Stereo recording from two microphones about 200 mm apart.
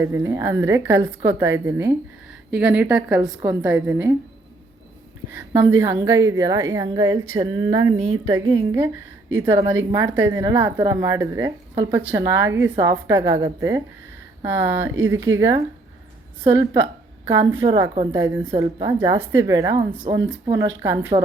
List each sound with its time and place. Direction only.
0.0 s a woman's voice: 15° right (ahead or behind)
5.3 s a woman's voice: 10° right (ahead or behind)
17.2 s a woman's voice: 20° right (ahead or behind)
18.1 s a woman's voice: 15° right (ahead or behind)